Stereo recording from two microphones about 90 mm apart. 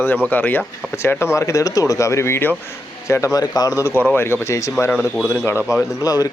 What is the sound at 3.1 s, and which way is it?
Speech, 35° left (ahead or behind).